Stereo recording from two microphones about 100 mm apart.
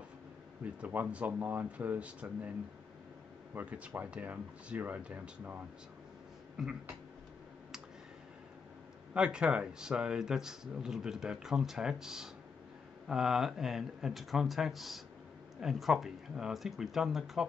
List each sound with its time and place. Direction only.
0.7 s speech: 15° right (ahead or behind)
3.5 s speech: 15° right (ahead or behind)
6.5 s a sound: 10° right (ahead or behind)
9.1 s speech: 10° right (ahead or behind)